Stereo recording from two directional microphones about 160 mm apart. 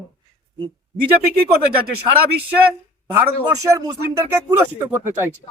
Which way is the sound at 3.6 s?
20° right (ahead or behind).